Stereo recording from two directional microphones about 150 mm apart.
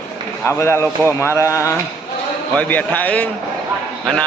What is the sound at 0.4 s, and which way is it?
A man's voice, 15° left (ahead or behind).